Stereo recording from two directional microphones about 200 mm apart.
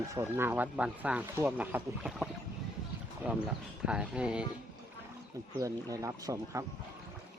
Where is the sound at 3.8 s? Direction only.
5° right (ahead or behind).